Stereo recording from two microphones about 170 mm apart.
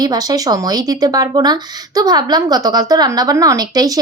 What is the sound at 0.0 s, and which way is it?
A woman's voice, 25° right (ahead or behind).